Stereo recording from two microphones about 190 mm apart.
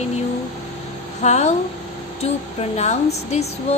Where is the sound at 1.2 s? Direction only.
35° left (ahead or behind).